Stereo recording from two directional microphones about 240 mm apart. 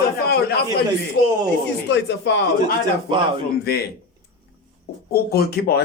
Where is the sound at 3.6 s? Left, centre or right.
Left.